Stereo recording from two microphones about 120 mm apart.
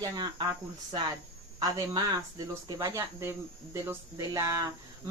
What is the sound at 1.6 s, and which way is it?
Speech, 30° right (ahead or behind).